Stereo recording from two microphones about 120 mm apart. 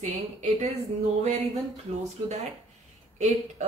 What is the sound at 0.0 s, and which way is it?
Speech, 80° right.